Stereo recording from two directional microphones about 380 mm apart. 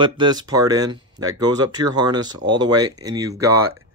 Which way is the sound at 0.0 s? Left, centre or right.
Centre.